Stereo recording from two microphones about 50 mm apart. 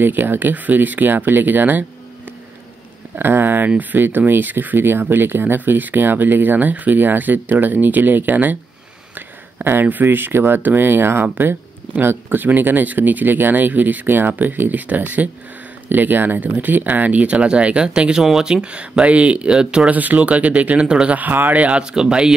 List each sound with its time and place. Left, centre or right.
0.0 s speech: right
3.2 s speech: right; by 19.9 s centre
19.9 s speech: right
21.2 s speech: right
21.9 s speech: centre